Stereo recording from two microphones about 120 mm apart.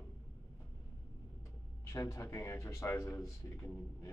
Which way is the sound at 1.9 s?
25° left (ahead or behind).